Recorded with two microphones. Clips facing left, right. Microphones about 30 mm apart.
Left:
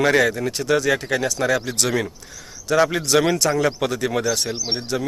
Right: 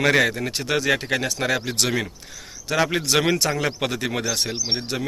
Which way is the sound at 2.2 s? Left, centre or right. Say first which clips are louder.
Even; right.